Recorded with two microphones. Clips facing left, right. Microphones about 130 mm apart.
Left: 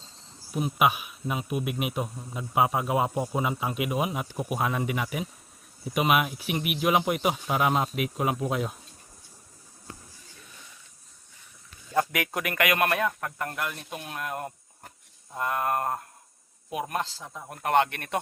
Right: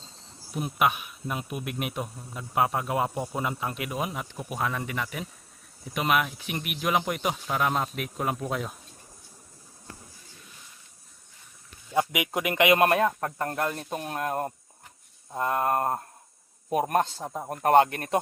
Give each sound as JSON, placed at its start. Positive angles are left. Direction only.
{"t": 0.5, "sound": "a man's voice", "side_deg": 5}
{"t": 11.9, "sound": "speech", "side_deg": -15}
{"t": 15.3, "sound": "mantra", "side_deg": -30}
{"t": 16.6, "sound": "a man's voice", "side_deg": -40}
{"t": 17.2, "sound": "speech", "side_deg": -40}